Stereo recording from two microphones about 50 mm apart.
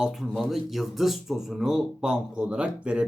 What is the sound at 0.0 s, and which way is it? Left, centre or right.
Speech, centre.